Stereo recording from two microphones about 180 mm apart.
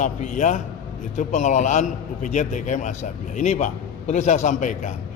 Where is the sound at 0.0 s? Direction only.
45° left (ahead or behind).